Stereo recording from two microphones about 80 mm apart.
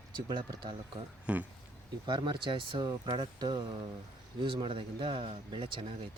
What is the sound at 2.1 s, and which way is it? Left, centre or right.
Speech, right.